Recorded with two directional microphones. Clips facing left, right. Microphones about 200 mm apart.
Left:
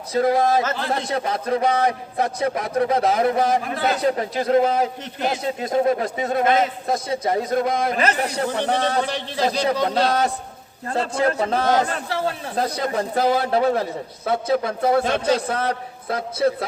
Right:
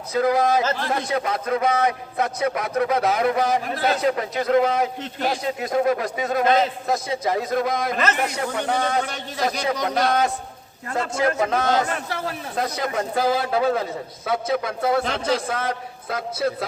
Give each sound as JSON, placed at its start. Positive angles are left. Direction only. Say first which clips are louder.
{"t": 0.1, "sound": "a man's voice", "louder": "left 1 dB", "side_deg": 30}